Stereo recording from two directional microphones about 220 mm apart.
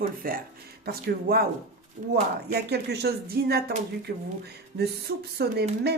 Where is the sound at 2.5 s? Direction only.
45° right (ahead or behind).